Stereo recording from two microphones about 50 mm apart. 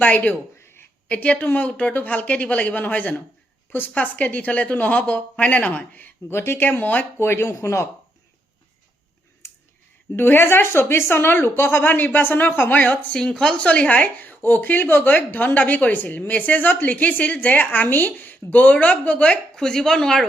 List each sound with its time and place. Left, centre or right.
0.0 s a woman's voice: left
0.6 s a sound: left
1.0 s a woman's voice: left
3.7 s a woman's voice: left
3.9 s a woman's voice: left
6.2 s speech: left
6.6 s a woman's voice: left
7.2 s speech: left
10.2 s speech: left
13.1 s speech: centre
13.7 s a woman's voice: left
19.5 s speech: centre